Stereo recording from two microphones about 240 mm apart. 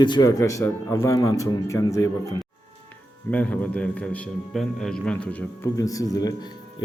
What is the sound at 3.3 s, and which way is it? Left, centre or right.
A man's voice, centre.